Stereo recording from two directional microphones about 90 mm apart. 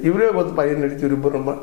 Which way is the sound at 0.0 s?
20° left (ahead or behind).